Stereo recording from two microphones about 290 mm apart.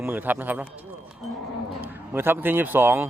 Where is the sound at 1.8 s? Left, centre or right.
Centre.